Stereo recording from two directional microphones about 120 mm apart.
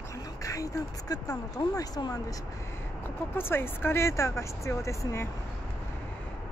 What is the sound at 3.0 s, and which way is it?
Speech, 20° left (ahead or behind).